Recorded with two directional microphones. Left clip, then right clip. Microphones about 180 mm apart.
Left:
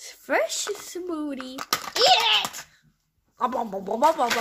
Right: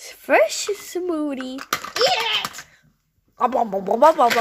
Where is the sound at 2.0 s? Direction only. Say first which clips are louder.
Left 2 dB; 40° left (ahead or behind).